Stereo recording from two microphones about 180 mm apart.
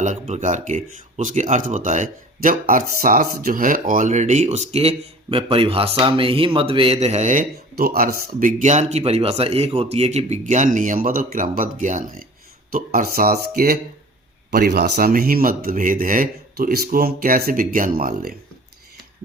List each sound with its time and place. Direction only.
0.0 s speech: 40° right (ahead or behind)
14.5 s speech: 55° right (ahead or behind)